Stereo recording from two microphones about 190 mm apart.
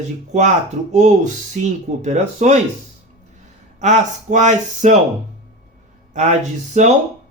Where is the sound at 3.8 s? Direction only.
40° right (ahead or behind).